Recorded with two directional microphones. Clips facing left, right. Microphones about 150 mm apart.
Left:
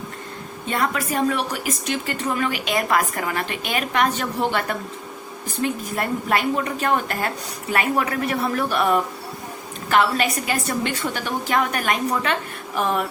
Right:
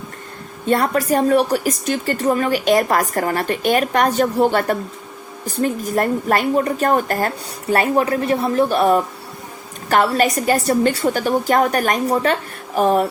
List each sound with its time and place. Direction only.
0.7 s a woman's voice: 40° right (ahead or behind)